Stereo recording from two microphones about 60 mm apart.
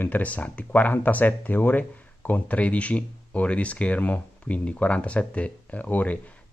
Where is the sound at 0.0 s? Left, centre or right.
Left.